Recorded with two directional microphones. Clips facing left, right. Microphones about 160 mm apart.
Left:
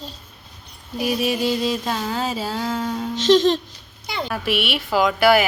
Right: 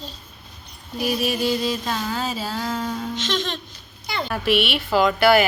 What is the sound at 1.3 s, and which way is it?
Music, 25° left (ahead or behind).